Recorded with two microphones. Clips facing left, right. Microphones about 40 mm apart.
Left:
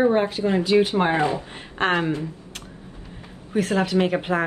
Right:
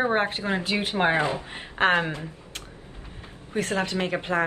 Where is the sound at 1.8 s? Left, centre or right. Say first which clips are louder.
Even; centre.